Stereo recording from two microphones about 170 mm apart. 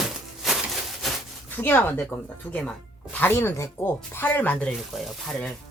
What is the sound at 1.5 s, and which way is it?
Speech, 10° left (ahead or behind).